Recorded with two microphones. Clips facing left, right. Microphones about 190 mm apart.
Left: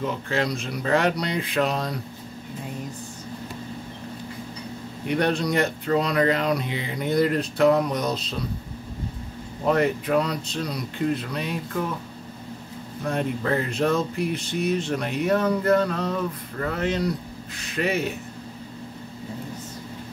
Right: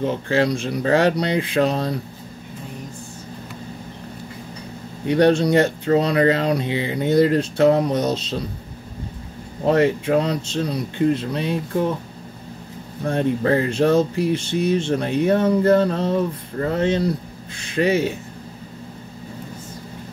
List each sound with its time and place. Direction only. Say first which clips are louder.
0.0 s speech: right 6 dB; 30° right (ahead or behind)
5.0 s speech: right 7 dB; 30° right (ahead or behind)
9.7 s speech: right 4 dB; 30° right (ahead or behind)
13.0 s speech: right 6 dB; 30° right (ahead or behind)